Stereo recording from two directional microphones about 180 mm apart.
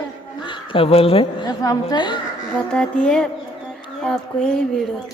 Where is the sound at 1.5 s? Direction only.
20° left (ahead or behind).